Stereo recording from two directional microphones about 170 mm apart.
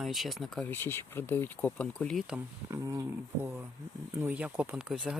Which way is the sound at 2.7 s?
20° right (ahead or behind).